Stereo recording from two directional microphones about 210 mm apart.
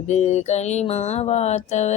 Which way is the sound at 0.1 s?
30° left (ahead or behind).